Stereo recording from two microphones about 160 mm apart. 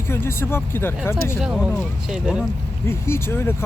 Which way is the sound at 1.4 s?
5° right (ahead or behind).